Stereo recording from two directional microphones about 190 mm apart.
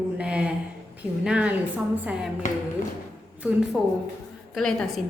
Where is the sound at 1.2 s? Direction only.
5° right (ahead or behind).